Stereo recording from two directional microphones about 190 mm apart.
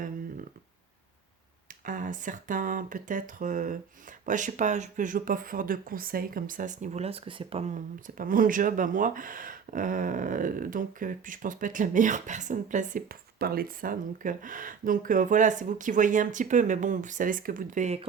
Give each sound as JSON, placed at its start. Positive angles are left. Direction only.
{"t": 1.8, "sound": "speech", "side_deg": -45}